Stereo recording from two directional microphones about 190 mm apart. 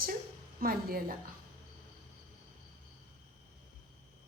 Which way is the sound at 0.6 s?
50° right (ahead or behind).